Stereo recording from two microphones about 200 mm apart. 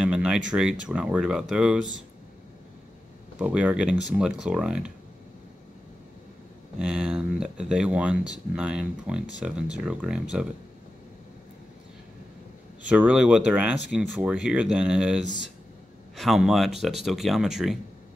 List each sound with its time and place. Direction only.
0.0 s a sound: 5° right (ahead or behind)
0.5 s speech: 5° right (ahead or behind)
3.3 s speech: 5° right (ahead or behind)
6.8 s speech: 5° right (ahead or behind)
12.8 s speech: 5° right (ahead or behind)